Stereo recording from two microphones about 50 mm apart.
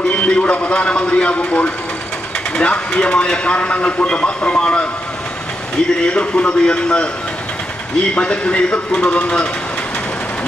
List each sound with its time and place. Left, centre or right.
0.1 s a man's voice: left
6.0 s a man's voice: left